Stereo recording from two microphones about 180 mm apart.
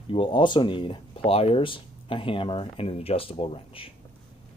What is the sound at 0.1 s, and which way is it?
Speech, 30° left (ahead or behind).